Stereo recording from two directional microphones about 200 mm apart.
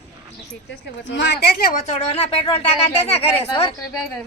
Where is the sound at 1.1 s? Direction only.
60° left (ahead or behind).